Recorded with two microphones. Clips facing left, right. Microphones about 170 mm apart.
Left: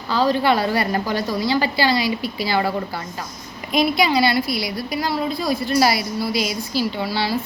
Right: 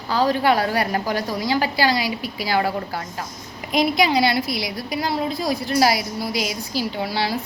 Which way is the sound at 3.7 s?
15° right (ahead or behind).